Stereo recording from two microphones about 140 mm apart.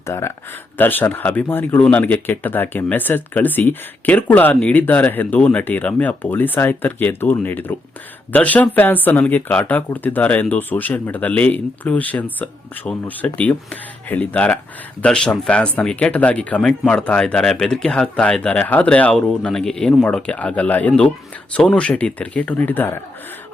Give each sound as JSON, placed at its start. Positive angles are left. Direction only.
{"t": 0.0, "sound": "speech", "side_deg": 20}